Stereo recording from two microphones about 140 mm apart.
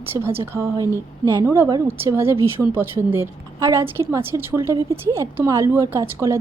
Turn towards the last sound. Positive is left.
turn(degrees=-20)  # may be behind; listen again after turning